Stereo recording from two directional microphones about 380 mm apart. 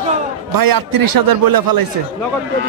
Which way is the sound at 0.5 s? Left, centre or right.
Right.